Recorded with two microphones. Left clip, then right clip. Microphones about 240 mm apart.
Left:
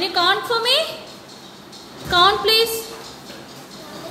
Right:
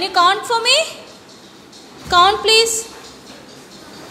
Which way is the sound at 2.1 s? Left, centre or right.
Centre.